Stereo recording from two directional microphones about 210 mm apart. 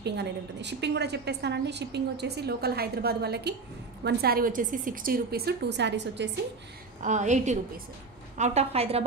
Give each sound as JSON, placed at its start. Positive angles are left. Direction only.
{"t": 0.0, "sound": "a woman's voice", "side_deg": -55}
{"t": 7.0, "sound": "a woman's voice", "side_deg": -35}